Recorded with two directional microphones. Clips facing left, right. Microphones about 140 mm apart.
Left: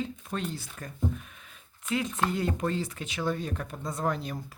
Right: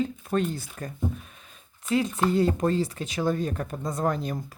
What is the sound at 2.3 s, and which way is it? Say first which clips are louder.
Speech: right 7 dB; 35° right (ahead or behind).